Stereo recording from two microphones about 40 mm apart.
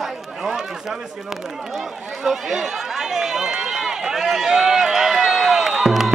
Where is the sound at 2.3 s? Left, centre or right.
Centre.